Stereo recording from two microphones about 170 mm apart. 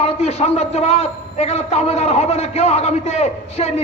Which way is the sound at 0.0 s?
35° left (ahead or behind).